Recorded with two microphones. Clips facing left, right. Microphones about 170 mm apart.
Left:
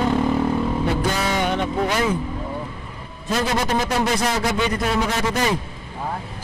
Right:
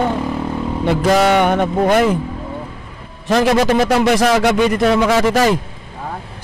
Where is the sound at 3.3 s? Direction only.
80° right.